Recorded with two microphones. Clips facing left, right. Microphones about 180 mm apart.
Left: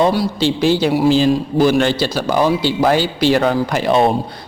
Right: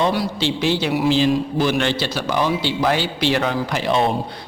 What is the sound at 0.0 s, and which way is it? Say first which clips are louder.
A man's voice: left 5 dB; 35° left (ahead or behind).